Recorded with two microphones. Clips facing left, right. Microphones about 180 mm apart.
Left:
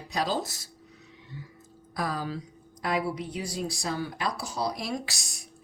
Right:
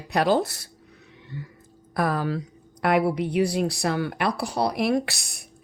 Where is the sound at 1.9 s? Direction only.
60° right (ahead or behind).